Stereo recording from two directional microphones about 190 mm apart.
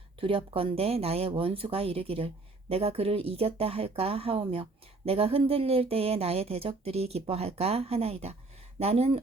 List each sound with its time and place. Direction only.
0.2 s speech: 30° right (ahead or behind)